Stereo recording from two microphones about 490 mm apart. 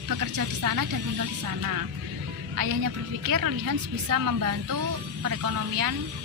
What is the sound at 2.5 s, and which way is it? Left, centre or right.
A woman's voice, right.